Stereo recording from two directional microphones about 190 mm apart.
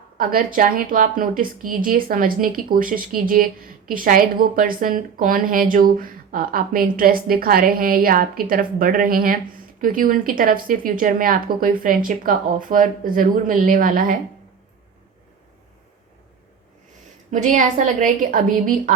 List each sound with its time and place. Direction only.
0.2 s a woman's voice: 50° right (ahead or behind)
17.3 s a woman's voice: 45° right (ahead or behind)